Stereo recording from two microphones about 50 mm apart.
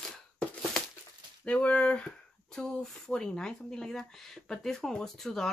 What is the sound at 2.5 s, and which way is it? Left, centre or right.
Speech, centre.